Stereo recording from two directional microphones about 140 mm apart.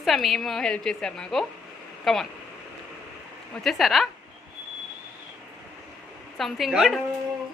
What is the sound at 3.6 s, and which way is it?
Speech, centre (ahead or behind).